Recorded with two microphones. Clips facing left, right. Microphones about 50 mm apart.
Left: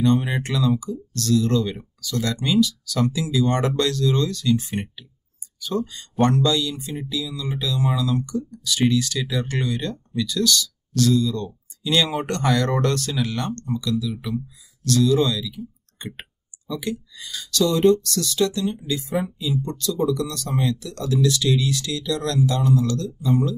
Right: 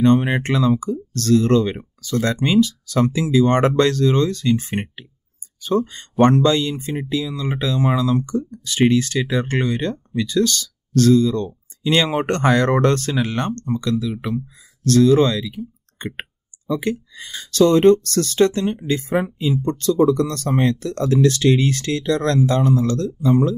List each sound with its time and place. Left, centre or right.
0.0 s speech: right